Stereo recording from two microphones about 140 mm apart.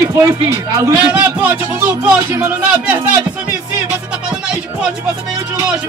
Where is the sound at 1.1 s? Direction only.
10° right (ahead or behind).